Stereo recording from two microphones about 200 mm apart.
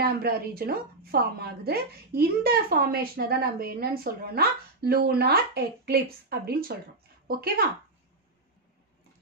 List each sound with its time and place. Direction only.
0.0 s a woman's voice: 50° right (ahead or behind)